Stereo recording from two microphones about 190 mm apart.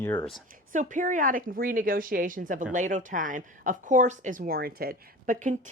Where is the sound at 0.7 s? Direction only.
40° right (ahead or behind).